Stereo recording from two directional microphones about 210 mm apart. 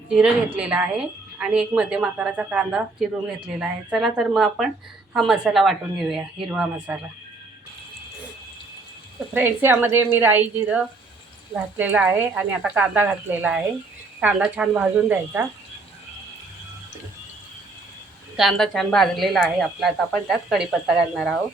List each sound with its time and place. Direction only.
0.1 s a woman's voice: 5° right (ahead or behind)
9.3 s speech: 10° right (ahead or behind)
18.3 s a woman's voice: centre (ahead or behind)